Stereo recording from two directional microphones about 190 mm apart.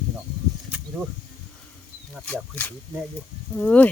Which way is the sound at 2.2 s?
5° left (ahead or behind).